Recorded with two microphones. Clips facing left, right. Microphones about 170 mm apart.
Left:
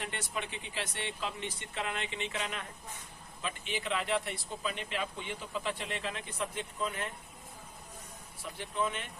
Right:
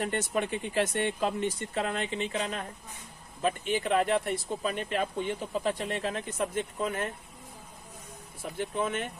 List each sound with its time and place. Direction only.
0.0 s speech: 45° right (ahead or behind)
8.4 s speech: 50° right (ahead or behind)